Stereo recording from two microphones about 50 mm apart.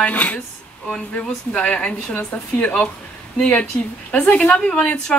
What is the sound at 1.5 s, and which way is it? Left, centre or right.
A woman's voice, left.